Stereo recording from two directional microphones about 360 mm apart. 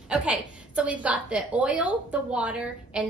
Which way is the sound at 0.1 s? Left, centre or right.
Centre.